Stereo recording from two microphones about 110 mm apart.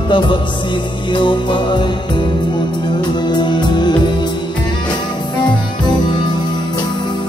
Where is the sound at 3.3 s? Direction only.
40° left (ahead or behind).